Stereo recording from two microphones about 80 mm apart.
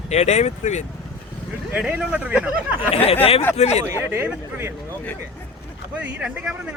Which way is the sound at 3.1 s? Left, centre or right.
Left.